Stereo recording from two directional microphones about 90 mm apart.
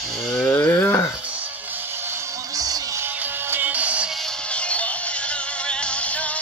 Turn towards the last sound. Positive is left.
turn(degrees=15)  # may be behind; listen again after turning